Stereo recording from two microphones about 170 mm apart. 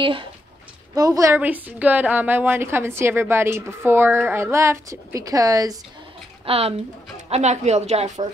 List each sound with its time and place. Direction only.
0.0 s a woman's voice: 30° right (ahead or behind)
0.9 s a woman's voice: 20° right (ahead or behind)
6.4 s a woman's voice: 35° right (ahead or behind)